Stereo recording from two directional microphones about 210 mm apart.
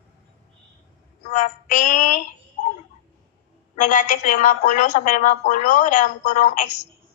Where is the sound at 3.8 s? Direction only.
35° left (ahead or behind).